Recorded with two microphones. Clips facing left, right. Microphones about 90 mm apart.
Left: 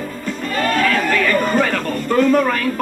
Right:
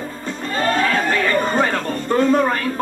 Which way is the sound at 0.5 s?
25° right (ahead or behind).